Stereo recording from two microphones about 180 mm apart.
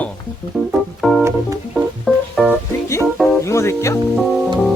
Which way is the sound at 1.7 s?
Centre (ahead or behind).